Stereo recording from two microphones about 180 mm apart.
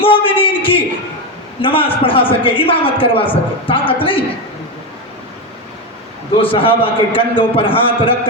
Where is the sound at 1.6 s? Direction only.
30° left (ahead or behind).